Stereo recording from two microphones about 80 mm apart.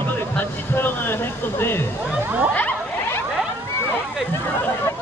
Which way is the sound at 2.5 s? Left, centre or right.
Centre.